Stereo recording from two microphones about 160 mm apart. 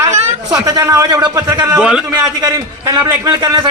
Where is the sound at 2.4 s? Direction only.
20° right (ahead or behind).